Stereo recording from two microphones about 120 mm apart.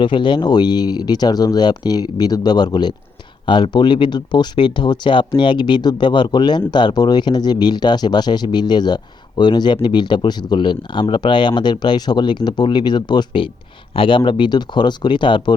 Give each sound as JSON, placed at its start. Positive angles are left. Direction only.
{"t": 0.0, "sound": "speech", "side_deg": 40}